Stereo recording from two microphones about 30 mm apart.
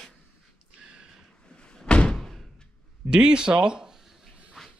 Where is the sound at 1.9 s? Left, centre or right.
Left.